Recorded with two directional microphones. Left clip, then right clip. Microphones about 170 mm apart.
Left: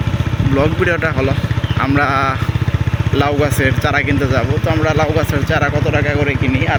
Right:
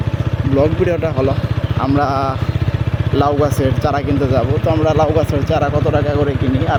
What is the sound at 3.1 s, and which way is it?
Speech, 15° right (ahead or behind).